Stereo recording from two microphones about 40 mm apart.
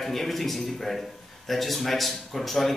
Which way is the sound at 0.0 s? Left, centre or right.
Centre.